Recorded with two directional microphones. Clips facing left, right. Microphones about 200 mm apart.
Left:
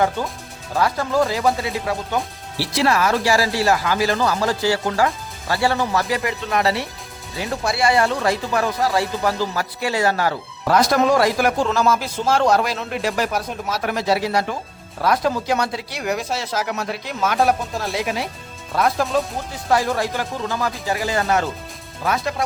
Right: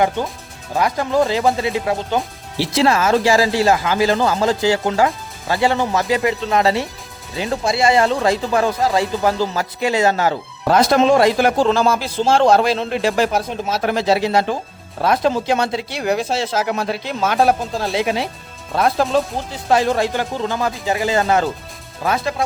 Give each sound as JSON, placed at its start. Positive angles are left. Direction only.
{"t": 0.8, "sound": "speech", "side_deg": -15}